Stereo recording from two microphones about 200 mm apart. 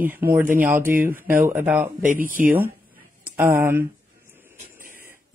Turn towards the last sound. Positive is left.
turn(degrees=-45)  # may be behind; listen again after turning